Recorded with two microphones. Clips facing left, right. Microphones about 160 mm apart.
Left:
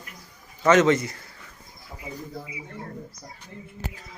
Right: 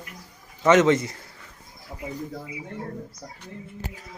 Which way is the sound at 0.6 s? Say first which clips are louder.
Right 1 dB; 20° right (ahead or behind).